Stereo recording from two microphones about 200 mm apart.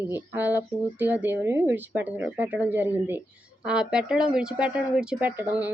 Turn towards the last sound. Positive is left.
turn(degrees=-10)  # may be behind; listen again after turning